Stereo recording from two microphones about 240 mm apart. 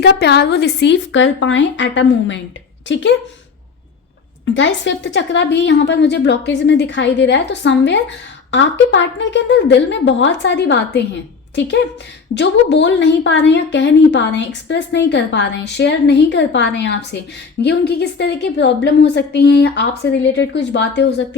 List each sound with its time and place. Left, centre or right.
0.0 s a woman's voice: left
4.5 s a woman's voice: left
12.3 s a woman's voice: left